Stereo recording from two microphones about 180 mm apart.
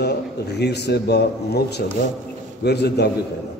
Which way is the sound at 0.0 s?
65° left (ahead or behind).